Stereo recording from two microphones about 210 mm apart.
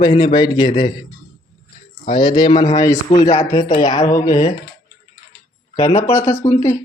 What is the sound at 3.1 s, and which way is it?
A woman's voice, 30° left (ahead or behind).